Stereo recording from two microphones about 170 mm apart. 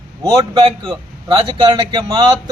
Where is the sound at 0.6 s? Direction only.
30° right (ahead or behind).